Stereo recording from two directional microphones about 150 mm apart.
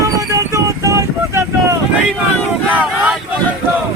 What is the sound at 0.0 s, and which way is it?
Vehicle, 20° right (ahead or behind).